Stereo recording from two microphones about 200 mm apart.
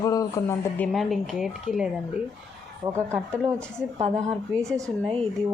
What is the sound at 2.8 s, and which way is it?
Speech, 15° right (ahead or behind).